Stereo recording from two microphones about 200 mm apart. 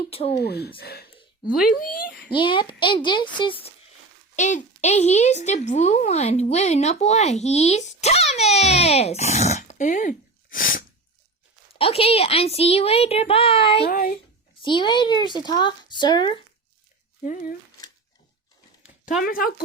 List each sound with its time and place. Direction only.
0.3 s speech: 55° left (ahead or behind)
2.3 s a woman's voice: 25° left (ahead or behind)
4.4 s speech: 35° left (ahead or behind)
11.7 s a woman's voice: 30° left (ahead or behind)
13.8 s speech: 45° left (ahead or behind)
14.6 s a woman's voice: 25° left (ahead or behind)
17.2 s speech: 40° left (ahead or behind)
19.2 s speech: 50° left (ahead or behind)